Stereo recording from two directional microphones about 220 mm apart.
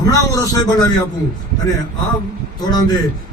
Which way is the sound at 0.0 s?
15° left (ahead or behind).